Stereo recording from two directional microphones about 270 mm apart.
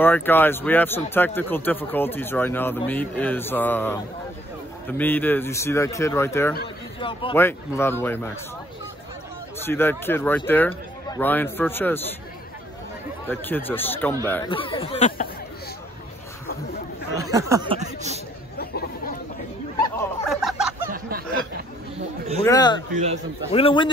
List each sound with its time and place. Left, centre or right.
0.0 s speech: centre
7.3 s speech: centre
9.7 s speech: centre
13.3 s speech: centre; by 15.2 s left
17.2 s a sound: centre
18.6 s chatter: left
20.0 s a sound: centre
22.4 s speech: centre